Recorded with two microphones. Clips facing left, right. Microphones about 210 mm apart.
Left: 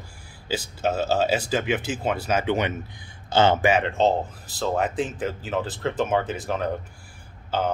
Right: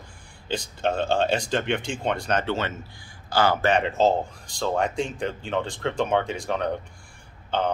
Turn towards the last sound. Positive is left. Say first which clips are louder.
# even
turn(degrees=5)  # may be behind; listen again after turning